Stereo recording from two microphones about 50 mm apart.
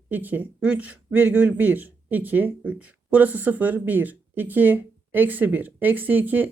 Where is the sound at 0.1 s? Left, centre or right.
Right.